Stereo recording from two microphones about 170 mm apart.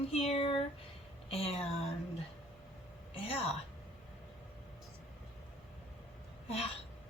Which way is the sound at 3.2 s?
35° left (ahead or behind).